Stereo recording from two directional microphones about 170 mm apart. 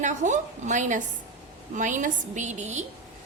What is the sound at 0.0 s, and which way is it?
A woman's voice, 45° right (ahead or behind).